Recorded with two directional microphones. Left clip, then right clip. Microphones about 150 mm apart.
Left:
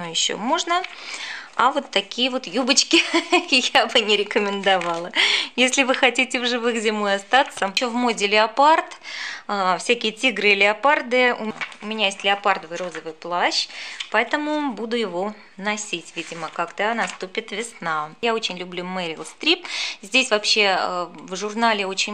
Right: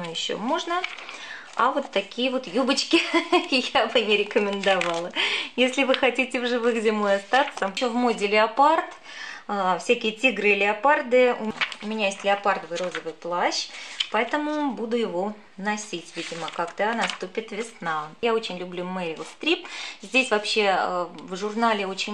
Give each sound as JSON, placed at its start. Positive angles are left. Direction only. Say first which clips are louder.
{"t": 0.0, "sound": "speech", "louder": "left 5 dB", "side_deg": 30}
{"t": 12.7, "sound": "speech", "louder": "even", "side_deg": 0}
{"t": 13.2, "sound": "speech", "louder": "left 4 dB", "side_deg": 25}